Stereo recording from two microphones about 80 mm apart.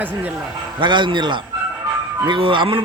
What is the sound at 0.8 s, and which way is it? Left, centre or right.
A man's voice, right.